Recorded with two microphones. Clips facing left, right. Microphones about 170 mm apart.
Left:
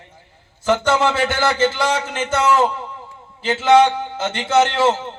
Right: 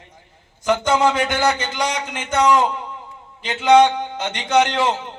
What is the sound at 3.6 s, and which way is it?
A man's voice, 15° right (ahead or behind).